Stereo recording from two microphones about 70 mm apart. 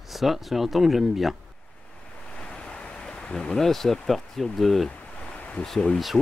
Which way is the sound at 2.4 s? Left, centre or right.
Centre.